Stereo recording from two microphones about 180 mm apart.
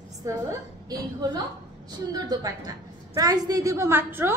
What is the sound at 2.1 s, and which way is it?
A woman's voice, 20° right (ahead or behind).